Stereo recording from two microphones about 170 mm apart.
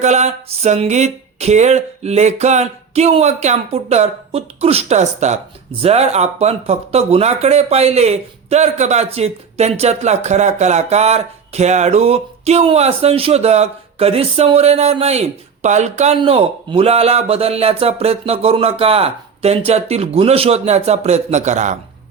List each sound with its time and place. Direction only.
0.0 s speech: 40° right (ahead or behind)